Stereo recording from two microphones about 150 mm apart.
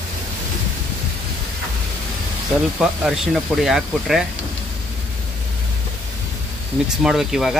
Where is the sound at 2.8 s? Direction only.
5° right (ahead or behind).